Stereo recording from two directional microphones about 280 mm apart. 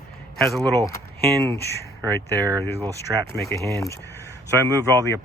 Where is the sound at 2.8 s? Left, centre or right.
Centre.